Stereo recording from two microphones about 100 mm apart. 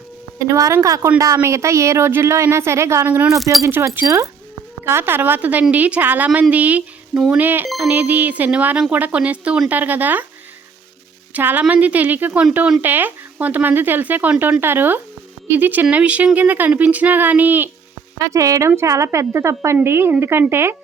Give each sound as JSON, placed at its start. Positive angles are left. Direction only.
{"t": 0.3, "sound": "speech", "side_deg": -35}
{"t": 11.3, "sound": "speech", "side_deg": -20}
{"t": 18.2, "sound": "speech", "side_deg": -30}